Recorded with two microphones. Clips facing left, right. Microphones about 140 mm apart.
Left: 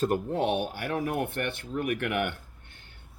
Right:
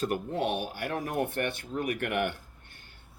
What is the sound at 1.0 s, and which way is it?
Speech, 55° left (ahead or behind).